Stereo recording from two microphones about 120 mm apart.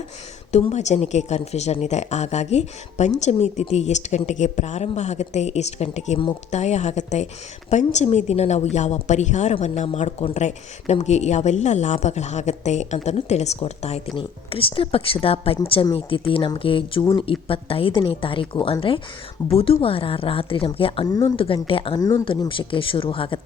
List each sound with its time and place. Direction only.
0.5 s speech: 70° left (ahead or behind)
14.2 s a woman's voice: 50° left (ahead or behind)
21.1 s speech: 30° left (ahead or behind)
21.3 s a woman's voice: 50° left (ahead or behind)